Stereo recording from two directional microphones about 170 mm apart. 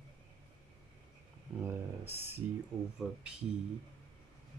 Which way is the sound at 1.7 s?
15° right (ahead or behind).